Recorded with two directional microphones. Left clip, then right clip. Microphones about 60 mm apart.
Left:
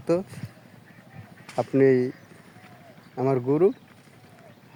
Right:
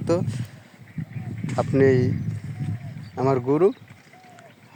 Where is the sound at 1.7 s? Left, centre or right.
Left.